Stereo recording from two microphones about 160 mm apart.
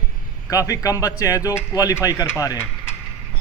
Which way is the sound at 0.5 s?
20° left (ahead or behind).